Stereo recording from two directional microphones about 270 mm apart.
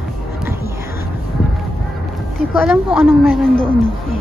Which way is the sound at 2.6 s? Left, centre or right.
Centre.